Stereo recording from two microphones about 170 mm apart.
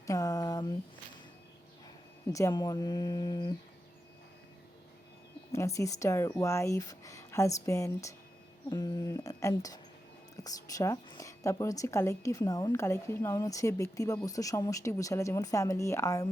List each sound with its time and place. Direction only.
0.0 s a sound: 20° left (ahead or behind)
2.2 s a woman's voice: 20° left (ahead or behind)
5.5 s a woman's voice: 15° left (ahead or behind)